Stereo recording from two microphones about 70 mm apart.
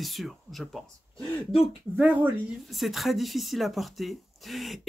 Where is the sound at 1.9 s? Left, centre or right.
Right.